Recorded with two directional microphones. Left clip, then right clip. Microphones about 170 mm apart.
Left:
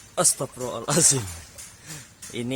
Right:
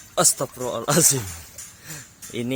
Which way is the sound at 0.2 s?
30° right (ahead or behind).